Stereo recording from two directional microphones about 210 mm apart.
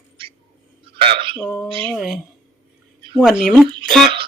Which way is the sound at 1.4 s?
5° left (ahead or behind).